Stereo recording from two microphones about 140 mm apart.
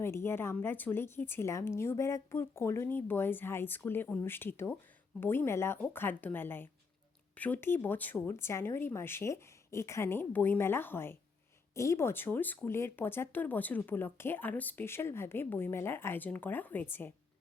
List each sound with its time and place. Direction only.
0.0 s speech: 15° left (ahead or behind)